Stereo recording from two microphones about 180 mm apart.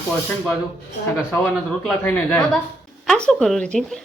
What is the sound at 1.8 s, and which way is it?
A man's voice, 10° left (ahead or behind).